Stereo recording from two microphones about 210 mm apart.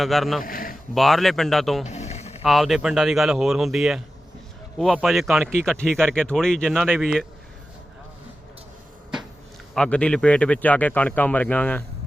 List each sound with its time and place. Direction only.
0.0 s speech: centre (ahead or behind)
0.4 s a sound: 40° left (ahead or behind)
0.9 s speech: centre (ahead or behind)
1.8 s a sound: 35° left (ahead or behind)
2.4 s speech: centre (ahead or behind)
9.7 s speech: 5° left (ahead or behind)